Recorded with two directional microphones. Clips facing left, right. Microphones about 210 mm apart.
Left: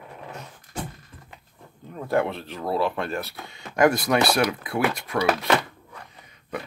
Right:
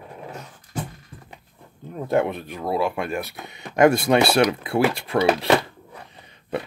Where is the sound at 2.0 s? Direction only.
20° right (ahead or behind).